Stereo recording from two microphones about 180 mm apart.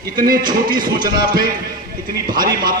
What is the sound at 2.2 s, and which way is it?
Speech, 50° right (ahead or behind).